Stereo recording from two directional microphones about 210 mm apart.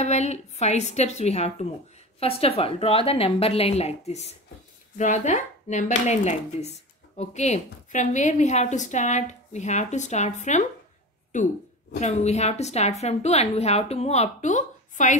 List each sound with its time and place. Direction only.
0.0 s a woman's voice: 30° left (ahead or behind)